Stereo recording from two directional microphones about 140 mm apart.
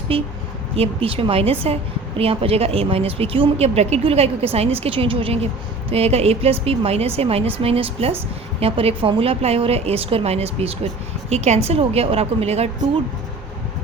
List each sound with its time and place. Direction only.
0.1 s a woman's voice: 40° right (ahead or behind)